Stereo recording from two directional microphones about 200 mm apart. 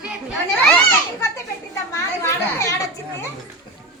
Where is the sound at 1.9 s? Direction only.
15° left (ahead or behind).